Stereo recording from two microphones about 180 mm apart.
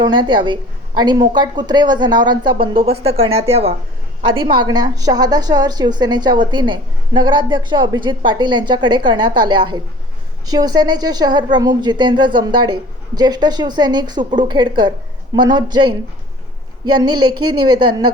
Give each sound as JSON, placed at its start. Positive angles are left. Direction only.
{"t": 0.0, "sound": "a woman's voice", "side_deg": -25}